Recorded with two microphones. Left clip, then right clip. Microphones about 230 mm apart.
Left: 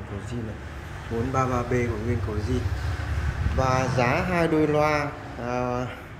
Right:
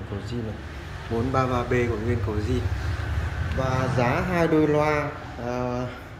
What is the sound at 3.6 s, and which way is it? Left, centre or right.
Speech, centre.